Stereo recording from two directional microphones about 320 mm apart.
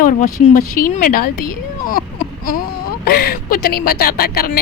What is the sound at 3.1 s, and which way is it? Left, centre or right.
Speech, left.